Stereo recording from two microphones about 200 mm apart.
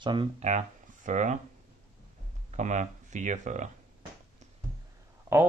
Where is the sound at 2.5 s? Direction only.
35° right (ahead or behind).